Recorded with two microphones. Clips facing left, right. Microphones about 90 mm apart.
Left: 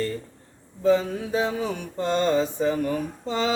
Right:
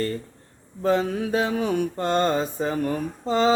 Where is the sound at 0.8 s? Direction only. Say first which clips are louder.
Left 1 dB; 55° right (ahead or behind).